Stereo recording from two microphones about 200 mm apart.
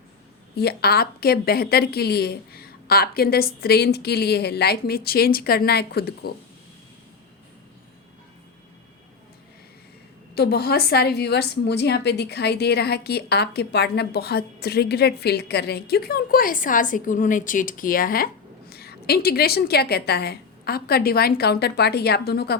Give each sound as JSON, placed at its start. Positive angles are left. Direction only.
{"t": 0.5, "sound": "a woman's voice", "side_deg": 50}
{"t": 10.3, "sound": "a woman's voice", "side_deg": 55}